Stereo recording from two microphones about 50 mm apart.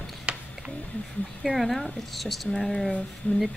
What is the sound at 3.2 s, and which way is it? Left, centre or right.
Speech, left.